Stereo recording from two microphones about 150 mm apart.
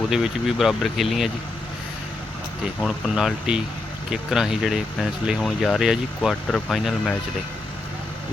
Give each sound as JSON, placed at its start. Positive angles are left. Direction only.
{"t": 0.1, "sound": "speech", "side_deg": -5}
{"t": 2.8, "sound": "speech", "side_deg": 0}